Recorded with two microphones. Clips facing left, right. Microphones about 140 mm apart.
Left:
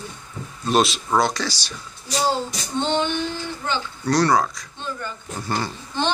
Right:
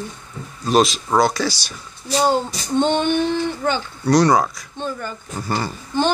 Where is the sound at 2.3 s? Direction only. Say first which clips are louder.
Right 5 dB; 55° right (ahead or behind).